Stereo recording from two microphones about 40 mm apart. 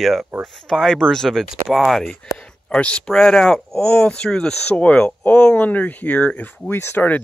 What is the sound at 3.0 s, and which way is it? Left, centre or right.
Speech, centre.